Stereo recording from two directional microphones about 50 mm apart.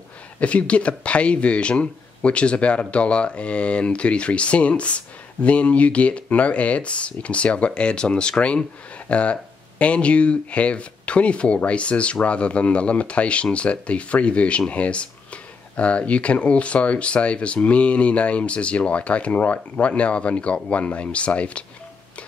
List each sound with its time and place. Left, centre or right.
0.4 s speech: left